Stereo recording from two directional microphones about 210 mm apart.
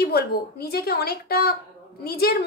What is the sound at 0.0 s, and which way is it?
A woman's voice, 50° left (ahead or behind).